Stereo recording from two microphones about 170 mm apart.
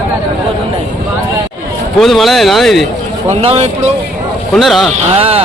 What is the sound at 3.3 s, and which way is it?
Speech, 35° right (ahead or behind).